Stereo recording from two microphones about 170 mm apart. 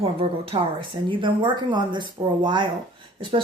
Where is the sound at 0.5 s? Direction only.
30° right (ahead or behind).